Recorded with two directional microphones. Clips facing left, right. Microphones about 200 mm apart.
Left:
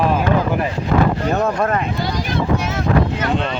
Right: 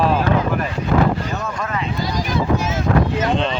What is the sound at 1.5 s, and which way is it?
Speech, 45° left (ahead or behind).